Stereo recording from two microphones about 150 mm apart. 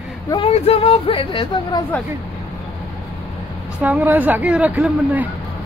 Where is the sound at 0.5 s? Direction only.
40° left (ahead or behind).